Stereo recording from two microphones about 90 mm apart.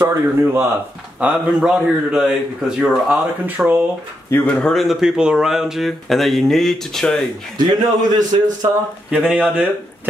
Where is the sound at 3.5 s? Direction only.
20° right (ahead or behind).